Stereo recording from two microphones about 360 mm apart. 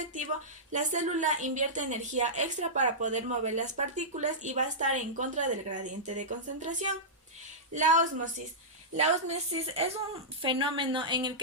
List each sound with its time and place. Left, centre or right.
0.7 s a woman's voice: centre